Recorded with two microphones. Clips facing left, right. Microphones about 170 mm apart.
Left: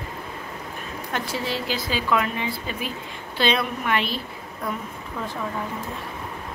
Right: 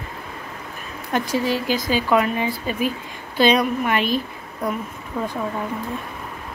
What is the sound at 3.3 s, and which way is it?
Speech, 15° right (ahead or behind).